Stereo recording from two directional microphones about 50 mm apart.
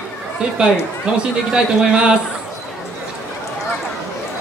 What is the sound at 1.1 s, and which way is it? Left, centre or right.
A man's voice, right.